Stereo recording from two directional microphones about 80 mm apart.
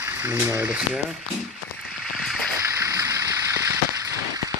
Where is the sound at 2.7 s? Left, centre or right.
Right.